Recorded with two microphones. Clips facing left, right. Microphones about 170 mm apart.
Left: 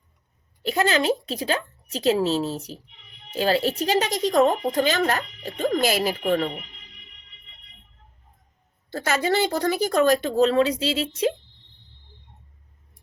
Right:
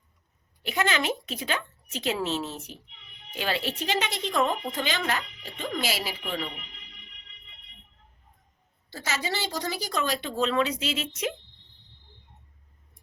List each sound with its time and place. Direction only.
0.6 s speech: 35° left (ahead or behind)
8.9 s speech: 55° left (ahead or behind); by 11.3 s 30° left (ahead or behind)